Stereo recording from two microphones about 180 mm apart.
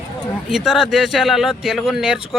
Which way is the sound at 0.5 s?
5° right (ahead or behind).